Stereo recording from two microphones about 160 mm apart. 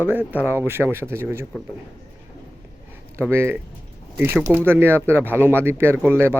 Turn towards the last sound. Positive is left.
turn(degrees=-10)  # may be behind; listen again after turning